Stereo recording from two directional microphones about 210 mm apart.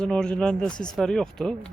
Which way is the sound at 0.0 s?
5° left (ahead or behind).